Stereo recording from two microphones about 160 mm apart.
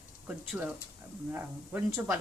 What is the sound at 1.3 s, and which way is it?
Stir, 15° right (ahead or behind).